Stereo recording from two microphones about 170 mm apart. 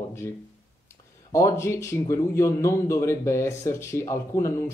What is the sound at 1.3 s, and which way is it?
A man's voice, 15° left (ahead or behind).